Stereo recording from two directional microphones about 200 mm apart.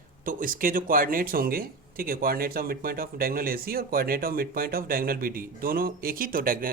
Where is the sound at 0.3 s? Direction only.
45° right (ahead or behind).